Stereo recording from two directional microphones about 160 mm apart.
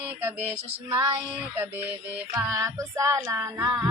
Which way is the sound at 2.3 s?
20° right (ahead or behind).